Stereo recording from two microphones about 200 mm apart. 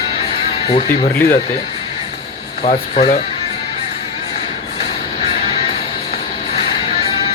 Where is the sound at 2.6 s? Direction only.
35° left (ahead or behind).